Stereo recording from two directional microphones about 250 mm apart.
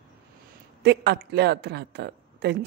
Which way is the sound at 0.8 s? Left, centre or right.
Right.